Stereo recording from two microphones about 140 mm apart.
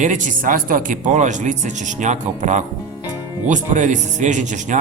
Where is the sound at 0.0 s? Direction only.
65° right (ahead or behind).